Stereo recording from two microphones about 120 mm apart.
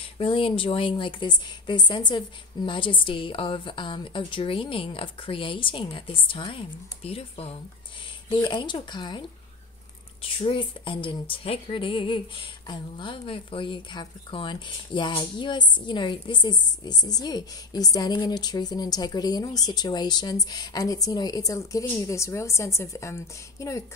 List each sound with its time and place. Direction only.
0.2 s a woman's voice: 45° left (ahead or behind)
8.3 s speech: 40° left (ahead or behind)
10.2 s a woman's voice: 45° left (ahead or behind); by 23.8 s 25° left (ahead or behind)